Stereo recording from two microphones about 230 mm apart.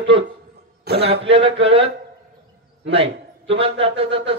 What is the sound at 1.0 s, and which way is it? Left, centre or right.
Speech, right.